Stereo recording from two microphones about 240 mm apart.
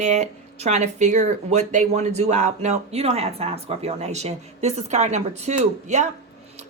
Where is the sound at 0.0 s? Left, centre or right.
Right.